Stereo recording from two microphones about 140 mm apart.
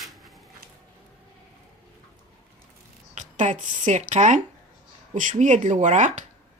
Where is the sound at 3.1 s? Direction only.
60° right (ahead or behind).